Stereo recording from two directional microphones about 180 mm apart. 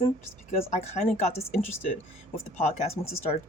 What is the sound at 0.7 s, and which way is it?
Speech, 35° left (ahead or behind).